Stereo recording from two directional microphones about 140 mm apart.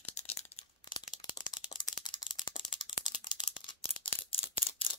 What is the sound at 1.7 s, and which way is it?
Rattle, 30° left (ahead or behind).